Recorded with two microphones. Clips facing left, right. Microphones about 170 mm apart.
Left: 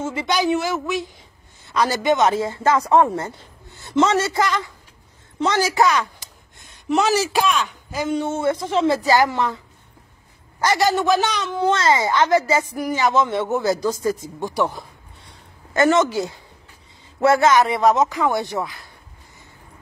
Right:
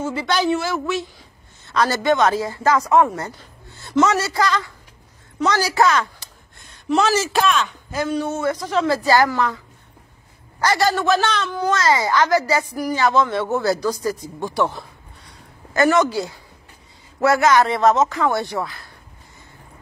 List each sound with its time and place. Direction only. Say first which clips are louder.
0.0 s a woman's voice: right 1 dB; 20° left (ahead or behind)
8.1 s speech: left 2 dB; 25° left (ahead or behind)
10.6 s speech: even; 20° left (ahead or behind)